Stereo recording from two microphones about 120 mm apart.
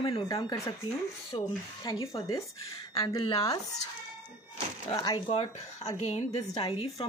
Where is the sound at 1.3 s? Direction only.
45° left (ahead or behind).